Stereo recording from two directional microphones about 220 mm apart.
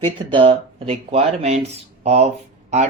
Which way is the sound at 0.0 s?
20° right (ahead or behind).